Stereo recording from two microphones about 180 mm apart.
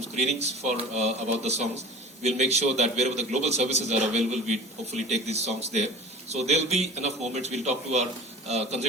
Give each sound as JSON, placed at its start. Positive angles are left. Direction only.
{"t": 0.2, "sound": "a man's voice", "side_deg": -35}